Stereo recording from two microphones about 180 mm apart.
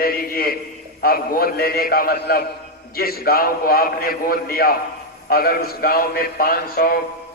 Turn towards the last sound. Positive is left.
turn(degrees=55)  # may be behind; listen again after turning